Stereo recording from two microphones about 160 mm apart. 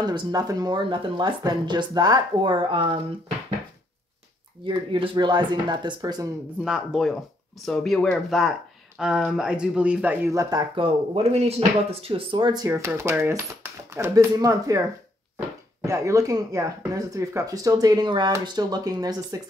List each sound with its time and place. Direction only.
0.0 s speech: 25° right (ahead or behind)
4.6 s speech: 30° right (ahead or behind)
6.6 s speech: centre (ahead or behind); by 10.6 s 20° right (ahead or behind)
11.3 s speech: 40° right (ahead or behind)
12.6 s speech: 15° right (ahead or behind)
15.8 s speech: 20° right (ahead or behind)